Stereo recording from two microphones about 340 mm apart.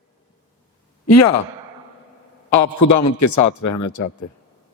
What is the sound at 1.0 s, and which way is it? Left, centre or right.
Speech, left.